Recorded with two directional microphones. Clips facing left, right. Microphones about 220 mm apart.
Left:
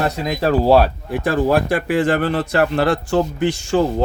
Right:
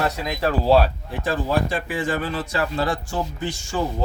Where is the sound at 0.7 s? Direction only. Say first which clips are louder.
Left 4 dB; 60° left (ahead or behind).